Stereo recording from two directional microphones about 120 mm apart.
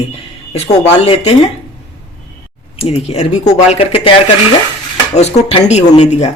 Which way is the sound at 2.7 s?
55° left (ahead or behind).